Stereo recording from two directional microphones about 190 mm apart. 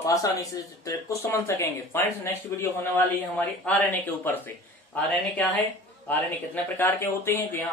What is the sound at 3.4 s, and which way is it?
Speech, 10° left (ahead or behind).